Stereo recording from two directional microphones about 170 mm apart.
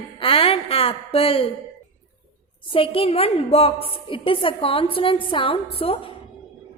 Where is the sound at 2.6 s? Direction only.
30° left (ahead or behind).